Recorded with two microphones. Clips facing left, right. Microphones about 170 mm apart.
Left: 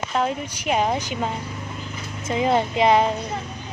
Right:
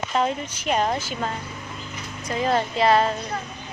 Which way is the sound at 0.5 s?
10° left (ahead or behind).